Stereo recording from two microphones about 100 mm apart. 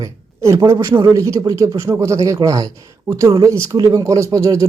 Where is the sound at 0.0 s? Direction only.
30° right (ahead or behind).